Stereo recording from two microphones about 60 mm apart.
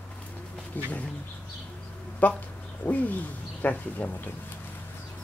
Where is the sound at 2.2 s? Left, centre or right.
Left.